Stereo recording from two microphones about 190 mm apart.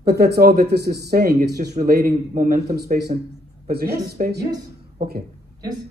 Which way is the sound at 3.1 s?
35° right (ahead or behind).